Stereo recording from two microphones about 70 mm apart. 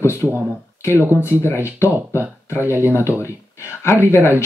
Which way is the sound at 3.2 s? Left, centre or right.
Left.